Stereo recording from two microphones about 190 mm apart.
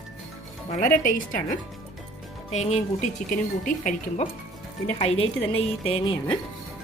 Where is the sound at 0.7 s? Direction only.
45° left (ahead or behind).